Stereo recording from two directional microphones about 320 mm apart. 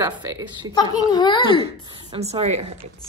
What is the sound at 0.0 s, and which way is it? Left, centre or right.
Speech, centre.